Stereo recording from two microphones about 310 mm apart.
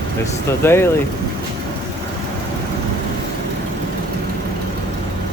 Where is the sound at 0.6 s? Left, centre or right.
Centre.